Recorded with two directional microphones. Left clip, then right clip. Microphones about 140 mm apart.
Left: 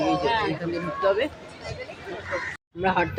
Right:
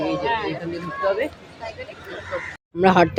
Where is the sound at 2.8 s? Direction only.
40° right (ahead or behind).